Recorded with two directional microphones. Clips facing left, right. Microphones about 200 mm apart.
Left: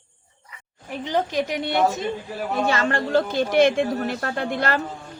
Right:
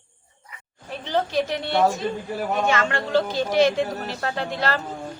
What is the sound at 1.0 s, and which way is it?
Speech, 15° left (ahead or behind).